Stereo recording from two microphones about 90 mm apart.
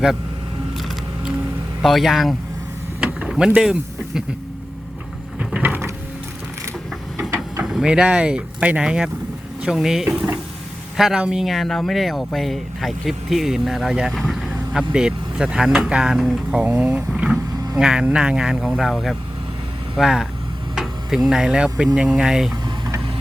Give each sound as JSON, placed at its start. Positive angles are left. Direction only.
{"t": 1.8, "sound": "speech", "side_deg": 0}
{"t": 3.0, "sound": "vehicle", "side_deg": -10}
{"t": 5.4, "sound": "a sound", "side_deg": -10}
{"t": 7.6, "sound": "speech", "side_deg": -5}
{"t": 10.1, "sound": "speech", "side_deg": -15}
{"t": 10.9, "sound": "speech", "side_deg": -5}
{"t": 14.1, "sound": "vehicle", "side_deg": 0}
{"t": 14.7, "sound": "speech", "side_deg": -5}